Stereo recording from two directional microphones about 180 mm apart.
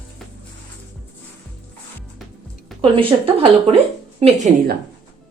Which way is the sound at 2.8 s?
30° right (ahead or behind).